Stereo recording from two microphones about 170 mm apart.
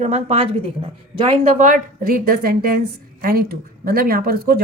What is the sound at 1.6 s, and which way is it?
Speech, 55° right (ahead or behind).